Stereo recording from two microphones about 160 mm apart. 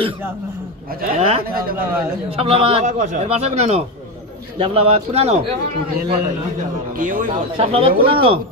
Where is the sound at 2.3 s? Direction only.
40° right (ahead or behind).